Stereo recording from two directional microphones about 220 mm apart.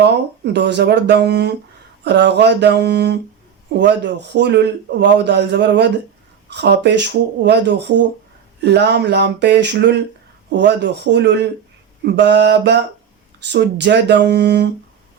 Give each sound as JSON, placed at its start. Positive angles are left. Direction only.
{"t": 0.5, "sound": "speech", "side_deg": -50}